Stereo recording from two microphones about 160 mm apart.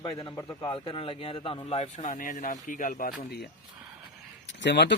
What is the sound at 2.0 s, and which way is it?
Speech, 55° left (ahead or behind).